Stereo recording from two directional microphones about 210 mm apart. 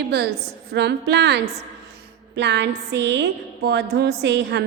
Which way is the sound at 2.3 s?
55° right (ahead or behind).